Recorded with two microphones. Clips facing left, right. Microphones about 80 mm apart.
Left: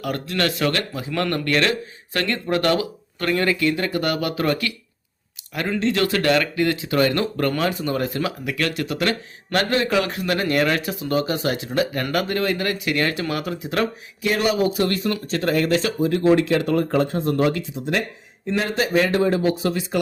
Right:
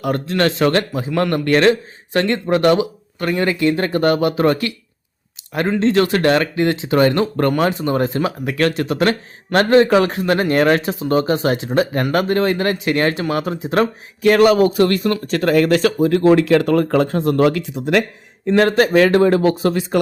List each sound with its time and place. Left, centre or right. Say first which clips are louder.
0.0 s speech: right 6 dB; right
3.8 s speech: right 7 dB; right
5.8 s speech: right 5 dB; right
14.2 s speech: right 9 dB; right
17.7 s speech: right 7 dB; right